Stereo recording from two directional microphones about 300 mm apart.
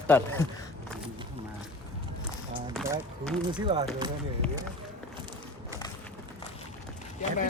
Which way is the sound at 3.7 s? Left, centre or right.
Centre.